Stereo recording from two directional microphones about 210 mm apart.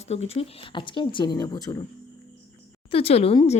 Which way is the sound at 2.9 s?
30° left (ahead or behind).